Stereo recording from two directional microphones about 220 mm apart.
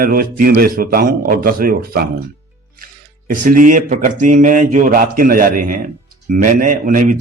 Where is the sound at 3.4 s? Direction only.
40° right (ahead or behind).